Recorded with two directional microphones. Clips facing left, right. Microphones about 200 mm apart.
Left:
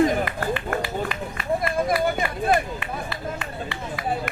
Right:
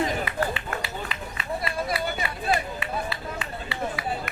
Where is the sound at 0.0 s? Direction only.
50° left (ahead or behind).